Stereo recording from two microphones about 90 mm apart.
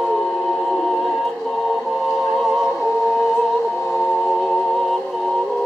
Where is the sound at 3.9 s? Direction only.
15° left (ahead or behind).